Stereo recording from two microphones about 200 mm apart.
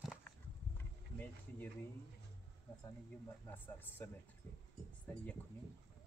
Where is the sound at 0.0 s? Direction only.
Centre (ahead or behind).